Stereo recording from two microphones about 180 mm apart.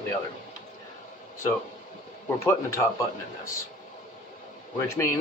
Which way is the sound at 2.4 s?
15° left (ahead or behind).